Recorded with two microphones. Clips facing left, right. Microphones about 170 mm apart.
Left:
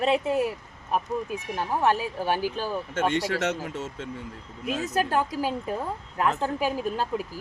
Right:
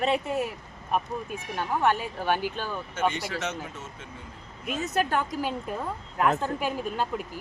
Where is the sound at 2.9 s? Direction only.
90° left.